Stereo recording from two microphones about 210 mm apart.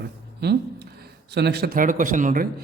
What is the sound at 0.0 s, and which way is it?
Speech, 50° right (ahead or behind).